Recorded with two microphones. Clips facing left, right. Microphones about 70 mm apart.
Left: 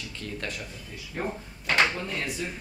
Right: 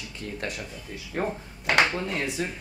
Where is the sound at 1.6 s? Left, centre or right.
Centre.